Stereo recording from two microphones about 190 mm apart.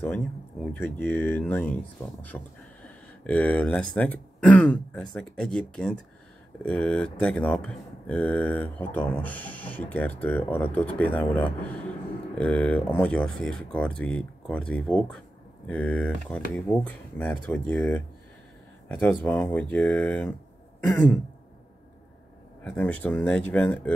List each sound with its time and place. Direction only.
0.7 s speech: 10° left (ahead or behind)
22.6 s speech: 5° left (ahead or behind)